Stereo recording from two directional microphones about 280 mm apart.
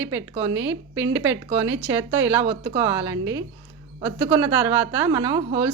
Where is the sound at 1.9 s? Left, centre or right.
Centre.